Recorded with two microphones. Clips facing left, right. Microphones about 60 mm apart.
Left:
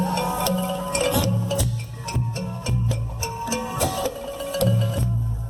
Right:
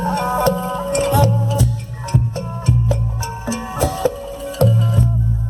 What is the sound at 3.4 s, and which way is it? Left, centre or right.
Music, right.